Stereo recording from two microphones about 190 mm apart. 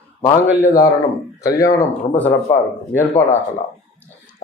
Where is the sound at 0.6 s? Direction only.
20° left (ahead or behind).